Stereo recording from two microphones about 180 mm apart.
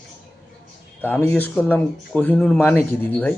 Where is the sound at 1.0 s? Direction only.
10° left (ahead or behind).